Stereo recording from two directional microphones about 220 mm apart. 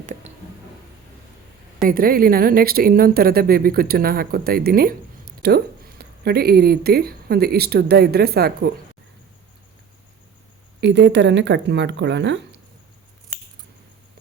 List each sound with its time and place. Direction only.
0.0 s a sound: 35° right (ahead or behind)
1.8 s a woman's voice: 40° right (ahead or behind)
10.8 s a woman's voice: 50° right (ahead or behind)